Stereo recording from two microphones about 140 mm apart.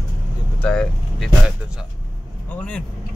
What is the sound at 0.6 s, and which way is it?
Speech, 10° left (ahead or behind).